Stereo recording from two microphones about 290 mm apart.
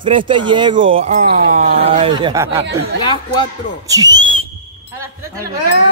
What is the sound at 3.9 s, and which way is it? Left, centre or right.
Speech, centre.